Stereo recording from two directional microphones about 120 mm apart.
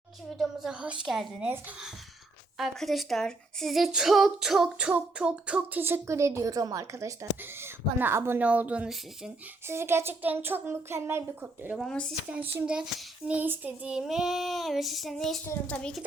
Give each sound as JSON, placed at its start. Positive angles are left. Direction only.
{"t": 0.3, "sound": "child singing", "side_deg": -5}
{"t": 2.6, "sound": "speech", "side_deg": 0}
{"t": 9.6, "sound": "a sound", "side_deg": -20}
{"t": 11.8, "sound": "child singing", "side_deg": 5}
{"t": 12.3, "sound": "child singing", "side_deg": -10}
{"t": 15.4, "sound": "a child's voice", "side_deg": 10}